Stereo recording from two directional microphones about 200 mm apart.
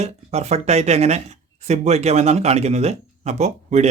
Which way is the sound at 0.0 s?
35° right (ahead or behind).